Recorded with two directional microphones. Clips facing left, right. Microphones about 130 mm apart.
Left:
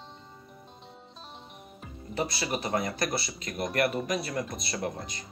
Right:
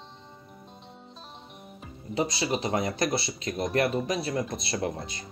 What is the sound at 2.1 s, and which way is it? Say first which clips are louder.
Speech: right 3 dB; 20° right (ahead or behind).